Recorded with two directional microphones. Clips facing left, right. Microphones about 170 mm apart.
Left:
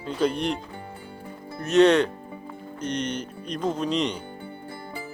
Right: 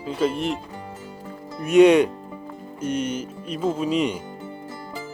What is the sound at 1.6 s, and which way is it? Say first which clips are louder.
Speech: right 4 dB; 10° right (ahead or behind).